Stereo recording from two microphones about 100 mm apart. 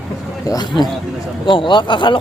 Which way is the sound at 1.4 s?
55° left (ahead or behind).